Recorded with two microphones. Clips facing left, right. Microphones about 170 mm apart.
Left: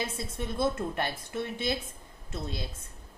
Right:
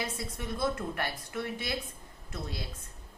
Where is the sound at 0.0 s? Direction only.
25° left (ahead or behind).